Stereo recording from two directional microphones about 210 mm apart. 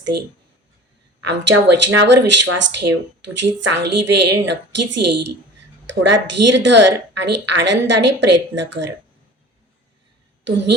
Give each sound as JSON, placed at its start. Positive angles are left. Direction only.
{"t": 1.3, "sound": "a woman's voice", "side_deg": -55}